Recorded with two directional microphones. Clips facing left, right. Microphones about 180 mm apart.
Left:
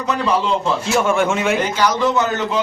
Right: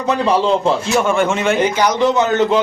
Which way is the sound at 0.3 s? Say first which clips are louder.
Right 4 dB; 30° right (ahead or behind).